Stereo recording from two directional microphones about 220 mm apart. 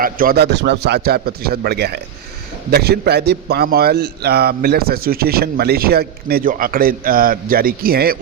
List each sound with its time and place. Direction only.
0.0 s a man's voice: 40° right (ahead or behind)